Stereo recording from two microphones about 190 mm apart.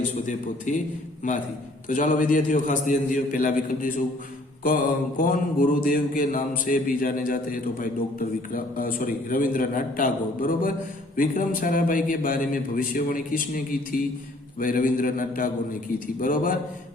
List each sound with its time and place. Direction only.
0.0 s a man's voice: 40° left (ahead or behind)
1.9 s a man's voice: 45° left (ahead or behind)